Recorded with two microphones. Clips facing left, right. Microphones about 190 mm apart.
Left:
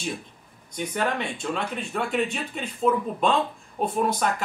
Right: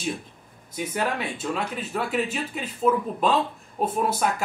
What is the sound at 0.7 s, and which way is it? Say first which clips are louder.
Speech: even; 5° right (ahead or behind).